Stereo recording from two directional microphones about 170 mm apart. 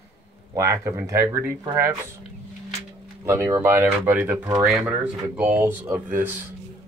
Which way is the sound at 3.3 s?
15° right (ahead or behind).